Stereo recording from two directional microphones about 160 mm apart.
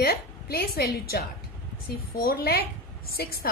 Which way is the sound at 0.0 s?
75° left (ahead or behind).